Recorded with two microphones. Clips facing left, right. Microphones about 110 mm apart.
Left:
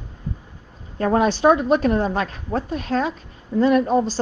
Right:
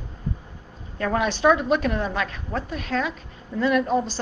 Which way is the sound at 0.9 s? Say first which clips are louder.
Left 5 dB; 35° left (ahead or behind).